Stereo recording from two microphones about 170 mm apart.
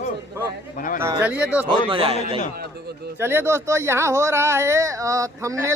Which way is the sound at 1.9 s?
30° right (ahead or behind).